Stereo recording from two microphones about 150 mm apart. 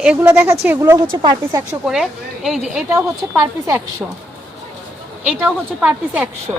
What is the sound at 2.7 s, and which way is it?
Speech, 15° right (ahead or behind).